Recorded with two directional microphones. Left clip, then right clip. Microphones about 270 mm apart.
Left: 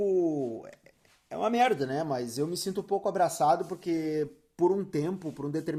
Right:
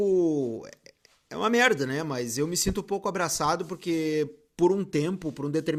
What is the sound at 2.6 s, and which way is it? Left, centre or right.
Speech, right.